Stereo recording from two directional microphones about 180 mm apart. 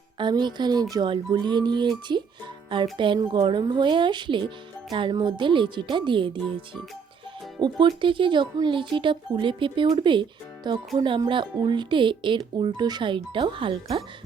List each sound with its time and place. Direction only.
0.2 s speech: 25° right (ahead or behind)
7.6 s speech: 25° right (ahead or behind)